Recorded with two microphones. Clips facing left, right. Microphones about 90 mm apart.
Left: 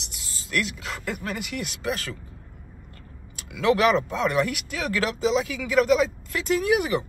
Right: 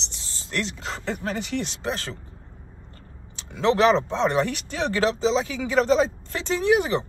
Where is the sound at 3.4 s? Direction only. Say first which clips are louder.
Right 1 dB; 30° right (ahead or behind).